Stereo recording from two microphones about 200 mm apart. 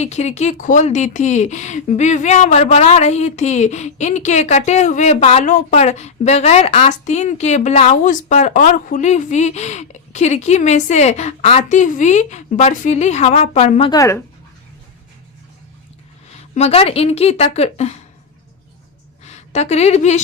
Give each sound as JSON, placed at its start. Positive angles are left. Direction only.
{"t": 0.0, "sound": "speech", "side_deg": 35}
{"t": 13.9, "sound": "speech", "side_deg": 15}
{"t": 16.6, "sound": "speech", "side_deg": 30}
{"t": 19.2, "sound": "a woman's voice", "side_deg": 35}